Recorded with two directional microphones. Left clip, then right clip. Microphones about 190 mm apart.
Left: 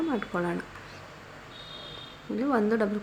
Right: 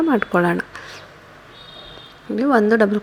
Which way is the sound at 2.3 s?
30° right (ahead or behind).